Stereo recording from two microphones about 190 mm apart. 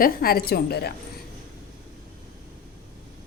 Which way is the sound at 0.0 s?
50° left (ahead or behind).